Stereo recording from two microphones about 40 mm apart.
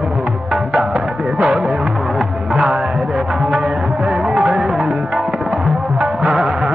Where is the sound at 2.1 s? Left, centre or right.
Centre.